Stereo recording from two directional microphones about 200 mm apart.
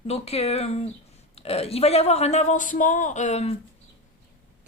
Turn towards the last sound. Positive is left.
turn(degrees=35)  # may be behind; listen again after turning